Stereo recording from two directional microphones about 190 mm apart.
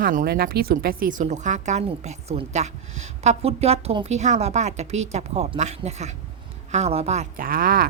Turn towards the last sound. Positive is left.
turn(degrees=-50)  # may be behind; listen again after turning